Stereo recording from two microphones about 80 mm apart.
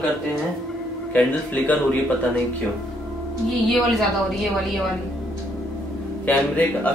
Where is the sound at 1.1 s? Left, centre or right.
Centre.